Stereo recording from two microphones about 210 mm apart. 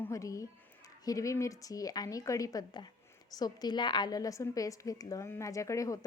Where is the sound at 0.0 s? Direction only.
15° left (ahead or behind).